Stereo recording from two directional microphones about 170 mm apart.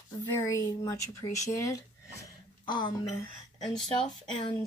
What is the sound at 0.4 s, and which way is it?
A woman's voice, 20° left (ahead or behind).